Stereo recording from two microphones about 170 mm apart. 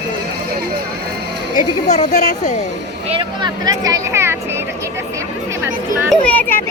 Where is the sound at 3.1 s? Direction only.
25° right (ahead or behind).